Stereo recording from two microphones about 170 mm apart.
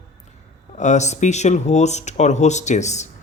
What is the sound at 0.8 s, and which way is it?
Speech, 45° left (ahead or behind).